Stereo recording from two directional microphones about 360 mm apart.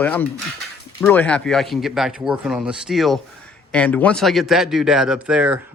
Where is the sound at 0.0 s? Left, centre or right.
Centre.